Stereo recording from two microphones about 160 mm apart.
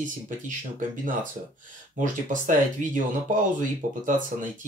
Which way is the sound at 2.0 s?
55° right (ahead or behind).